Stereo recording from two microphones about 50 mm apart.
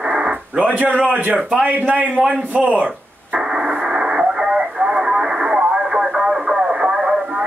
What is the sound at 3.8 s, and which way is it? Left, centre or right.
Radio, centre.